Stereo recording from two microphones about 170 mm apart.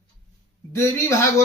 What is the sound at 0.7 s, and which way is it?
Speech, 15° left (ahead or behind).